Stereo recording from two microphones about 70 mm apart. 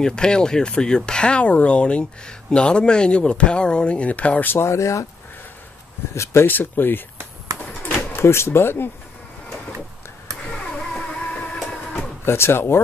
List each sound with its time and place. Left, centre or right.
0.0 s speech: centre
4.5 s speech: left
6.1 s speech: left
6.4 s speech: left
7.5 s a sound: left
8.3 s speech: left
10.4 s a sound: centre
12.3 s speech: left